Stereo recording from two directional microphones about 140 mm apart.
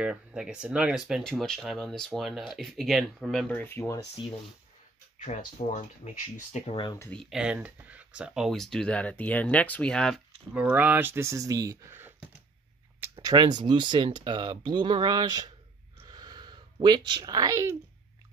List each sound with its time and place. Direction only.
0.0 s speech: 5° right (ahead or behind); by 4.0 s 15° left (ahead or behind)
5.2 s speech: 60° left (ahead or behind)
6.6 s speech: 35° left (ahead or behind)
7.1 s speech: centre (ahead or behind)
10.5 s speech: 10° right (ahead or behind)
13.2 s speech: 30° right (ahead or behind)
16.1 s a sound: 30° right (ahead or behind)